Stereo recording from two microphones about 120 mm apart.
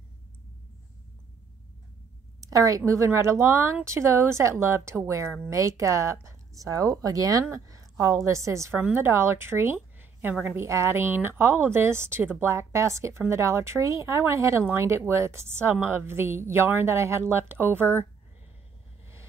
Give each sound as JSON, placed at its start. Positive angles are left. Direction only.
{"t": 2.4, "sound": "a woman's voice", "side_deg": -30}